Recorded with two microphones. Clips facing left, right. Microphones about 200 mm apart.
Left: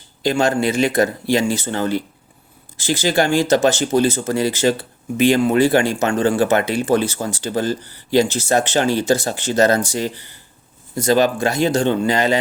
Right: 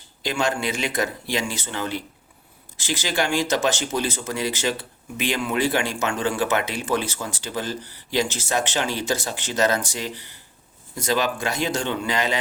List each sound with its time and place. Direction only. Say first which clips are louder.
0.2 s speech: left 7 dB; 40° left (ahead or behind)